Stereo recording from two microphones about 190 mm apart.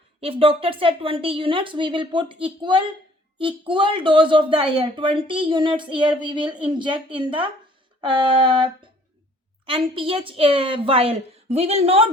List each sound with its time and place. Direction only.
0.2 s a woman's voice: 30° right (ahead or behind)